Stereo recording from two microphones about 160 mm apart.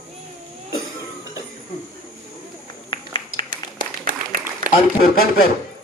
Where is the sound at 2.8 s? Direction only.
30° left (ahead or behind).